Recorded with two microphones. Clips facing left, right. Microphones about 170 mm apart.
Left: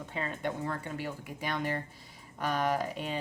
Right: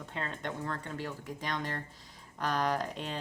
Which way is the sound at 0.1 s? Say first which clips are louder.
Left 3 dB; 10° left (ahead or behind).